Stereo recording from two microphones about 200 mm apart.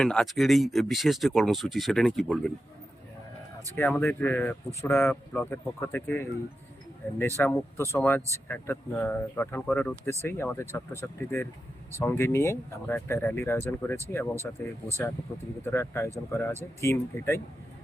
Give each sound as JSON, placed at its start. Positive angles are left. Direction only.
{"t": 0.0, "sound": "speech", "side_deg": 5}
{"t": 3.8, "sound": "speech", "side_deg": 10}
{"t": 15.3, "sound": "speech", "side_deg": 15}